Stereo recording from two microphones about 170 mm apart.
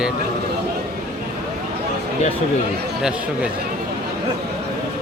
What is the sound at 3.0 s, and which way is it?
Speech, 5° right (ahead or behind).